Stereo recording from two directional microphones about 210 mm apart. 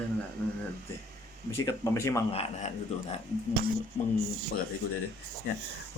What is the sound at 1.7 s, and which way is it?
Speech, 15° left (ahead or behind).